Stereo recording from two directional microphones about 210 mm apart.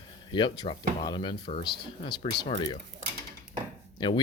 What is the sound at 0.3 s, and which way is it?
Speech, 20° left (ahead or behind).